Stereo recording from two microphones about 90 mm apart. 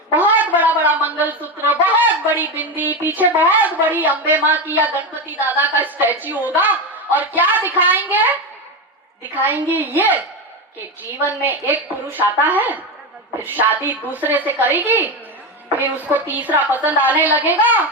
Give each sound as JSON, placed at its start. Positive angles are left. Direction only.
{"t": 0.1, "sound": "a woman's voice", "side_deg": -20}
{"t": 11.3, "sound": "a woman's voice", "side_deg": -20}